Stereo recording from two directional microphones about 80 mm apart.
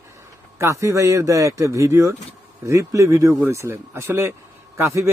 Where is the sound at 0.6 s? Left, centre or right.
Right.